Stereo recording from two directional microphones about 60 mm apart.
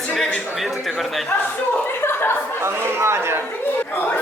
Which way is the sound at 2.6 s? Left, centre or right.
Right.